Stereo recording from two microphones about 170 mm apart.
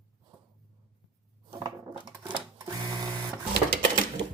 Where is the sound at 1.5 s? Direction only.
25° right (ahead or behind).